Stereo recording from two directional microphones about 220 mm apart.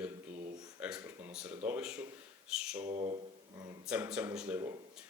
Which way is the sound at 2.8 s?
30° right (ahead or behind).